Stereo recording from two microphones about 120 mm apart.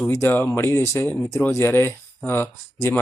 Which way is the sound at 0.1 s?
20° left (ahead or behind).